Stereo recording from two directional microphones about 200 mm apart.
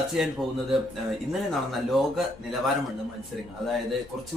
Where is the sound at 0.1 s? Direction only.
Centre (ahead or behind).